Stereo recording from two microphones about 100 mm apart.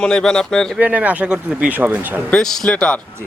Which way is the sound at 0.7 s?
15° right (ahead or behind).